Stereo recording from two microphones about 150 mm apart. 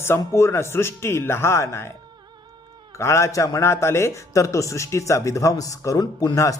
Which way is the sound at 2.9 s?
20° left (ahead or behind).